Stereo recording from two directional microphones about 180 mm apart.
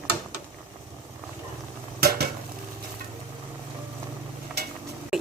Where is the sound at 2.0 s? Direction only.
60° right (ahead or behind).